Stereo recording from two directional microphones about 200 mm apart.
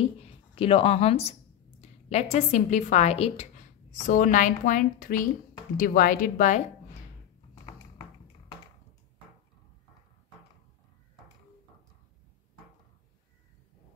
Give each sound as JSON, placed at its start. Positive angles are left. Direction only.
{"t": 0.0, "sound": "a woman's voice", "side_deg": 30}